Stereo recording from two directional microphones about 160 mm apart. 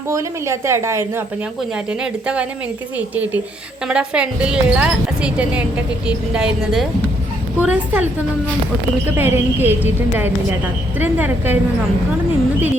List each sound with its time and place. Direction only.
0.1 s a woman's voice: 20° right (ahead or behind)
3.8 s a woman's voice: 5° right (ahead or behind)
9.0 s a woman's voice: 15° right (ahead or behind)